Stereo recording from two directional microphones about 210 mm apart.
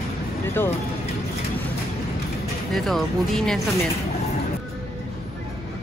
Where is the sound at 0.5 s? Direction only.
10° left (ahead or behind).